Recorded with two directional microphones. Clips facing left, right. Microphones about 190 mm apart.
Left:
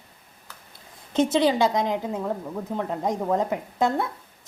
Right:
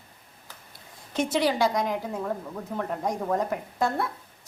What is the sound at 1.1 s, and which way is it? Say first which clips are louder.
A woman's voice: left 4 dB; 20° left (ahead or behind).